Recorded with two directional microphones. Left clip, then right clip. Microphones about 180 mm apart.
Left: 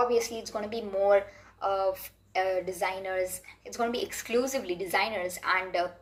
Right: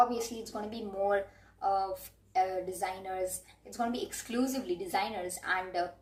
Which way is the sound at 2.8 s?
15° right (ahead or behind).